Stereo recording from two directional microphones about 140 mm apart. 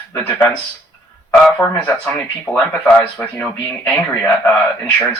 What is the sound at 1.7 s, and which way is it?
Speech, 15° left (ahead or behind).